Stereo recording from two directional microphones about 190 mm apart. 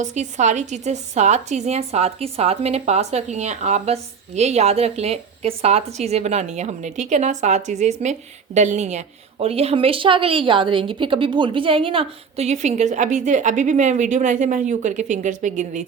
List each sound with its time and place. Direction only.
0.0 s speech: 40° right (ahead or behind)